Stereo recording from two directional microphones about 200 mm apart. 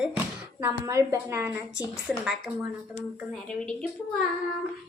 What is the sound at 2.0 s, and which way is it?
Child singing, centre (ahead or behind).